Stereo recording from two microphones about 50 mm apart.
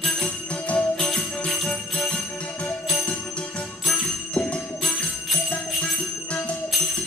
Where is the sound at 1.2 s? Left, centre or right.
Left.